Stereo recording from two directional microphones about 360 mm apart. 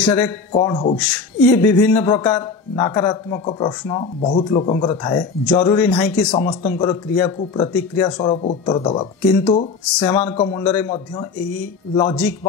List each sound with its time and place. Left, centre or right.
0.0 s a man's voice: centre
8.2 s speech: centre
10.2 s a man's voice: centre
11.9 s speech: centre